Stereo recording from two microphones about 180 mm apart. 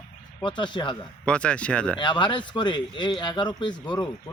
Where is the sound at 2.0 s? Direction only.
25° left (ahead or behind).